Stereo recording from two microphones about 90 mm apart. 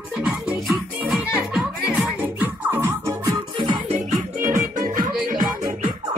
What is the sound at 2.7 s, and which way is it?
Music, 35° right (ahead or behind).